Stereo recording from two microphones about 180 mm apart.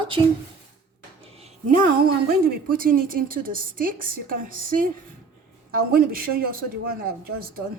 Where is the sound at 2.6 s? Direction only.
50° right (ahead or behind).